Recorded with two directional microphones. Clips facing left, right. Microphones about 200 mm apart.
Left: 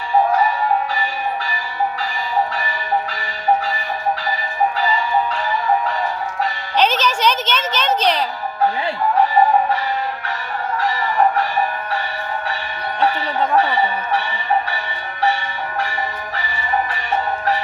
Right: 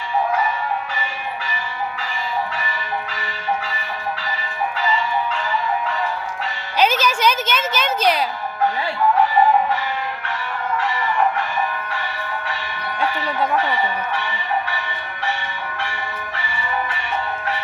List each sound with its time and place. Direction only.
6.7 s speech: 10° right (ahead or behind)
10.8 s music: 40° left (ahead or behind)
13.6 s speech: 35° left (ahead or behind)
17.1 s music: 40° left (ahead or behind)